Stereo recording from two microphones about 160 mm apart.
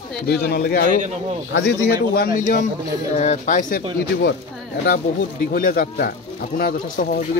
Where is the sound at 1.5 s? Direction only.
90° left; by 3.8 s 50° left (ahead or behind).